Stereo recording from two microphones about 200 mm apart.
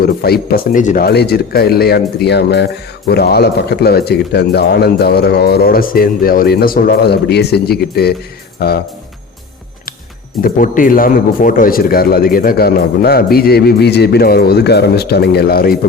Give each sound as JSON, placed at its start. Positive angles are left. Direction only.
{"t": 0.0, "sound": "speech", "side_deg": 50}
{"t": 10.4, "sound": "speech", "side_deg": 45}